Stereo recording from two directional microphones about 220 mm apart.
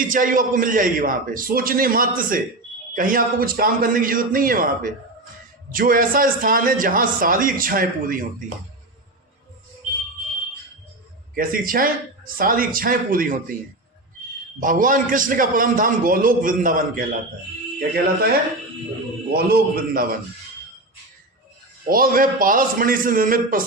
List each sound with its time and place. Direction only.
0.0 s a man's voice: 40° right (ahead or behind)
11.3 s a man's voice: 40° right (ahead or behind)
14.6 s a man's voice: 40° right (ahead or behind)
19.3 s a man's voice: 45° right (ahead or behind)
21.8 s a man's voice: 40° right (ahead or behind)